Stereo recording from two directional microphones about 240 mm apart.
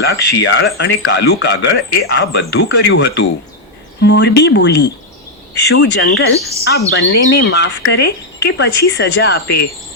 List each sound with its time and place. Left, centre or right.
0.0 s speech: left
6.7 s speech: left